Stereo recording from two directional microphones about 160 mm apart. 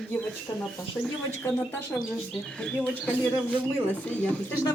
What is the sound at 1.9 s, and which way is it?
Speech, 5° left (ahead or behind).